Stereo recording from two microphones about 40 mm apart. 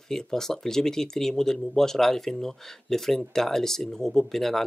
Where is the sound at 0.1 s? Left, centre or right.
Centre.